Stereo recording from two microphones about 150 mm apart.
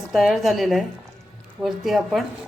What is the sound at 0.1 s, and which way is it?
A woman's voice, centre (ahead or behind).